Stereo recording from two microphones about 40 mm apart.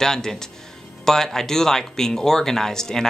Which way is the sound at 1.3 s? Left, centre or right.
Centre.